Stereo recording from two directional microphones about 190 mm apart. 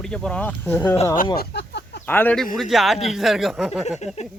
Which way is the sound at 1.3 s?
60° left (ahead or behind).